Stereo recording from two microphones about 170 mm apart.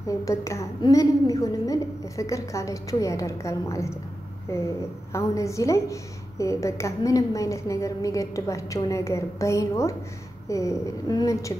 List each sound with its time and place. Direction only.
0.2 s a woman's voice: 20° left (ahead or behind)
5.1 s a woman's voice: 20° left (ahead or behind)